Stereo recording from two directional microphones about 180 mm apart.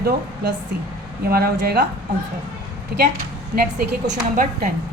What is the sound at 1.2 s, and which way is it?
Speech, 60° right (ahead or behind).